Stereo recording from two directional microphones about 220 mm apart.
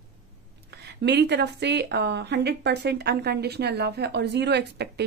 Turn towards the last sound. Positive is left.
turn(degrees=-50)  # may be behind; listen again after turning